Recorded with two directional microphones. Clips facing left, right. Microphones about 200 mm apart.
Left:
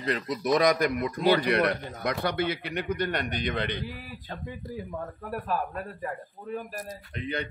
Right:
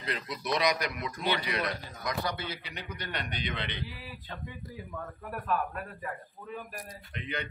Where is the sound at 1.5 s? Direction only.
60° left (ahead or behind); by 3.8 s 45° left (ahead or behind).